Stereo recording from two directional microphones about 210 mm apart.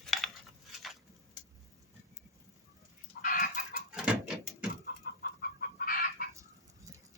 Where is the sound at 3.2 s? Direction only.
40° left (ahead or behind).